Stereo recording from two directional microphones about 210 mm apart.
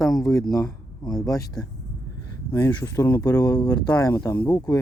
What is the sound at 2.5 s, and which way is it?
Speech, 15° left (ahead or behind).